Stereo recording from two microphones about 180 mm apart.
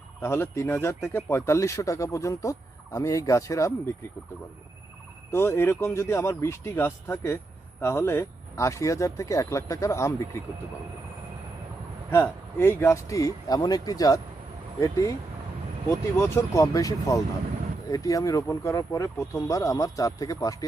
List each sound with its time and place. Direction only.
0.2 s speech: 15° left (ahead or behind)
5.3 s speech: 15° left (ahead or behind)
12.1 s speech: 15° left (ahead or behind)
16.3 s speech: 20° left (ahead or behind)